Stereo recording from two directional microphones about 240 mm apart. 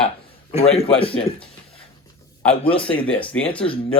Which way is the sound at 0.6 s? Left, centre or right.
Left.